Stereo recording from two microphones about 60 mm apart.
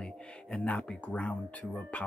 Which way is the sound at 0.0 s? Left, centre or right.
Centre.